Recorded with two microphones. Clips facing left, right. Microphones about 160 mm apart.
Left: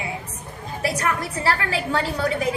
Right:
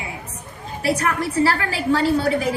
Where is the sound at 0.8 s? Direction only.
30° right (ahead or behind).